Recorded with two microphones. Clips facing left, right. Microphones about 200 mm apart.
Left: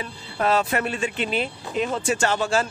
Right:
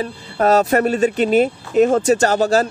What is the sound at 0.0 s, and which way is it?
Speech, 40° right (ahead or behind).